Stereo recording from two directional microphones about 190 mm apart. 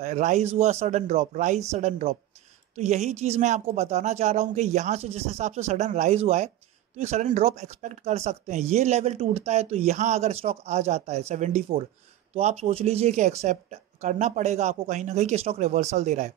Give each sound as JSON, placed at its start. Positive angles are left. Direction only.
{"t": 0.0, "sound": "speech", "side_deg": -40}